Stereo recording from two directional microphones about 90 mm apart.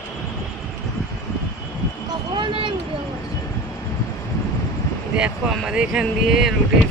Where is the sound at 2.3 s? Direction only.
60° right (ahead or behind).